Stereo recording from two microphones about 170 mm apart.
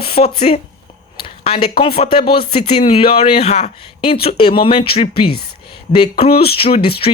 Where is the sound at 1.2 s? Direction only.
30° left (ahead or behind).